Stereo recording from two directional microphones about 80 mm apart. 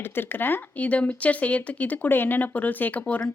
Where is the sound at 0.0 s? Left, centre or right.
Left.